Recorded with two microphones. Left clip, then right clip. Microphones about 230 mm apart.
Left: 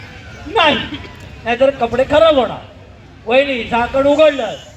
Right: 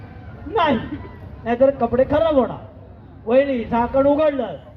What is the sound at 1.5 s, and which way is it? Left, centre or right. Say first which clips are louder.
A man's voice: left 3 dB; right.